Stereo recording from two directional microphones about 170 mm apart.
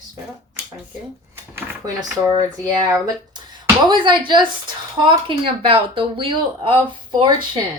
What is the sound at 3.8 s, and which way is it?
Speech, 25° right (ahead or behind).